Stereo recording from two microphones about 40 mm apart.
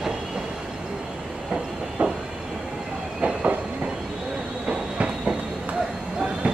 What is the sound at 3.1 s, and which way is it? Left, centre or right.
Train, right.